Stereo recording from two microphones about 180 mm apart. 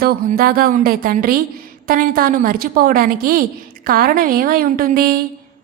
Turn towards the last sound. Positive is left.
turn(degrees=-55)  # may be behind; listen again after turning